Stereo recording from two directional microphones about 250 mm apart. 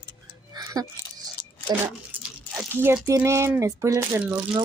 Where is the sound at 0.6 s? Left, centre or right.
Centre.